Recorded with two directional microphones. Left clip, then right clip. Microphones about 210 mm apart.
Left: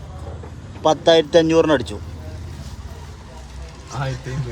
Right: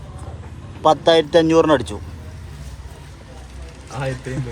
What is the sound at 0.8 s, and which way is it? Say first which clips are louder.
Speech: right 1 dB; 10° left (ahead or behind).